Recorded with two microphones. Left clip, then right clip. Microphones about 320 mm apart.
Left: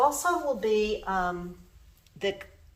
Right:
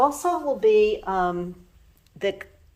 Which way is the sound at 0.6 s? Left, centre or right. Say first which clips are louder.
Right 8 dB; right.